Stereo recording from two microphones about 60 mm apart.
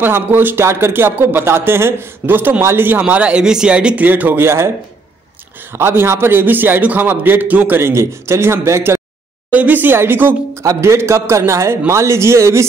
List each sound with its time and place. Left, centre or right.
0.0 s a man's voice: right
3.0 s speech: right
4.0 s a man's voice: right
5.7 s a man's voice: right
7.8 s a man's voice: right
9.5 s a man's voice: right
10.5 s a man's voice: right